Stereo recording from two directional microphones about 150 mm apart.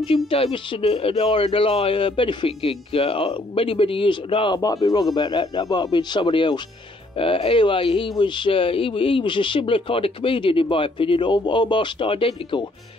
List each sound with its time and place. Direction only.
0.0 s speech: 35° left (ahead or behind)